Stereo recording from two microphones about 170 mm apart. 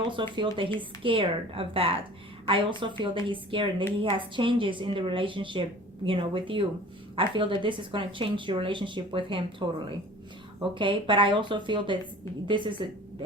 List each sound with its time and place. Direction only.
0.1 s a woman's voice: 30° right (ahead or behind)